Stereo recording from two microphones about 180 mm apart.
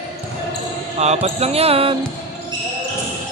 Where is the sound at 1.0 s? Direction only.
35° right (ahead or behind).